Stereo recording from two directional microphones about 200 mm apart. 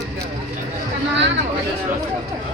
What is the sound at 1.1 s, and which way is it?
Speech, 65° right (ahead or behind).